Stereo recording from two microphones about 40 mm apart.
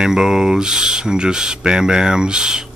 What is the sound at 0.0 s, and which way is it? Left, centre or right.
Speech, centre.